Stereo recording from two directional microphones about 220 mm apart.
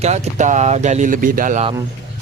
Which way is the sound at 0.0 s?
30° right (ahead or behind).